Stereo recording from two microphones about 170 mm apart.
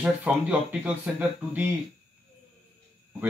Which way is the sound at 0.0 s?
10° right (ahead or behind).